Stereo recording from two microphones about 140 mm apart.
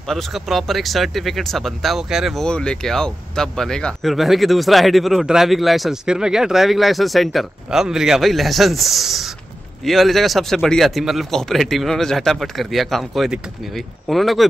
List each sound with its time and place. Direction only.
0.1 s speech: centre (ahead or behind)